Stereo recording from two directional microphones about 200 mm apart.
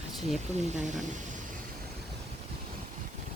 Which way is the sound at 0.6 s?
35° right (ahead or behind).